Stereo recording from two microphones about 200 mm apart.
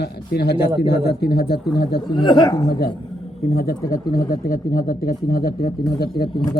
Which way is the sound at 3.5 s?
50° left (ahead or behind).